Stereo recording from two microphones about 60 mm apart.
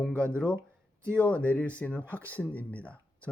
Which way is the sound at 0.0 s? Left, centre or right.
Centre.